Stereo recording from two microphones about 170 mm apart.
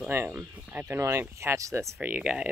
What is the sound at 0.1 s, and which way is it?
Speech, 15° right (ahead or behind).